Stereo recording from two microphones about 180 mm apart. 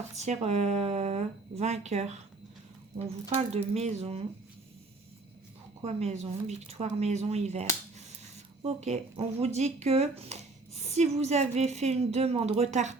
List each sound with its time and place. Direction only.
0.2 s speech: 35° right (ahead or behind)
3.2 s speech: 35° right (ahead or behind)
5.8 s speech: 40° right (ahead or behind)